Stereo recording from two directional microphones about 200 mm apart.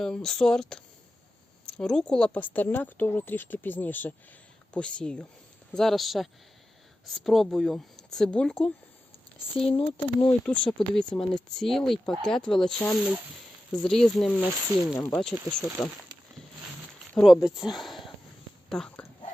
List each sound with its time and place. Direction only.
0.0 s speech: 5° left (ahead or behind)
9.6 s speech: 25° left (ahead or behind)
10.4 s speech: 5° left (ahead or behind)
17.2 s speech: centre (ahead or behind)